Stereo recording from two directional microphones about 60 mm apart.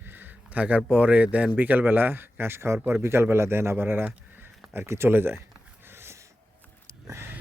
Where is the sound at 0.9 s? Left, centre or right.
Right.